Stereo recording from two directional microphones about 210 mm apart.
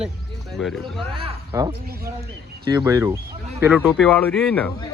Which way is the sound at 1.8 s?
45° right (ahead or behind).